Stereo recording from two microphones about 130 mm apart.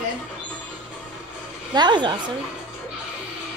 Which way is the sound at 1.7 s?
35° right (ahead or behind).